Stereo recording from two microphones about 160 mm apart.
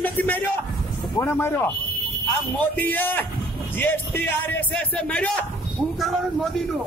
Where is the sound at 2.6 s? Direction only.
10° left (ahead or behind).